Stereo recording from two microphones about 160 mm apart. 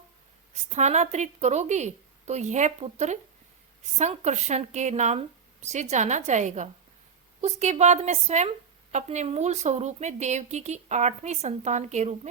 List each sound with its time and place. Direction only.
0.7 s a woman's voice: 45° right (ahead or behind)